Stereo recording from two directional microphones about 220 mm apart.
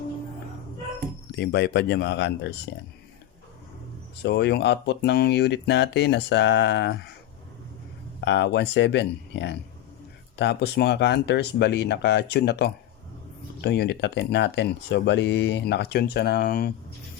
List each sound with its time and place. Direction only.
1.4 s speech: 50° left (ahead or behind)
4.2 s speech: 50° left (ahead or behind)
8.2 s speech: 55° left (ahead or behind)